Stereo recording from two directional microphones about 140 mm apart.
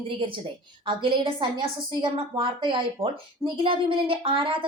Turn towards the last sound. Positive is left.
turn(degrees=-40)  # may be behind; listen again after turning